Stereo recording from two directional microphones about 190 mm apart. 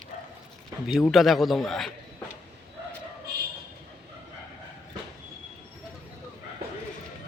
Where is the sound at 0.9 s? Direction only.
Centre (ahead or behind).